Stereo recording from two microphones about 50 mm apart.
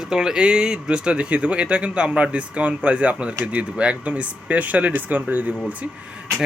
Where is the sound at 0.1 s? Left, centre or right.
Centre; by 5.7 s right.